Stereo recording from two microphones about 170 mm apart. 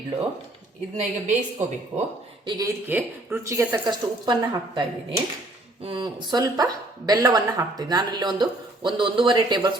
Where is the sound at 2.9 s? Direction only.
15° right (ahead or behind).